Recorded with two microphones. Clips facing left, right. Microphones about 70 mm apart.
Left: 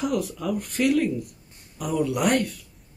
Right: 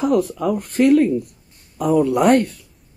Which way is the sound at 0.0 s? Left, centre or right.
Right.